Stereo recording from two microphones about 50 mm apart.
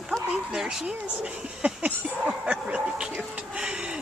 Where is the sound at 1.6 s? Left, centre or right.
Right.